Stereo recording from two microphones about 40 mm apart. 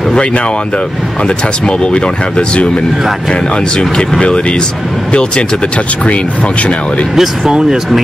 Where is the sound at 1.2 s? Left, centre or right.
Left.